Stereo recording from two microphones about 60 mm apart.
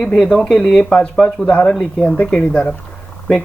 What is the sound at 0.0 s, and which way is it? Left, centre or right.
Speech, centre.